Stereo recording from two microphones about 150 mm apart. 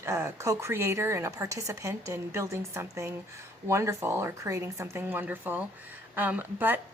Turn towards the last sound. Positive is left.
turn(degrees=-15)  # may be behind; listen again after turning